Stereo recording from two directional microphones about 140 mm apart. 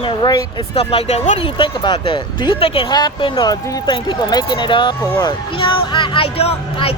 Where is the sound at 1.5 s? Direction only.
35° left (ahead or behind).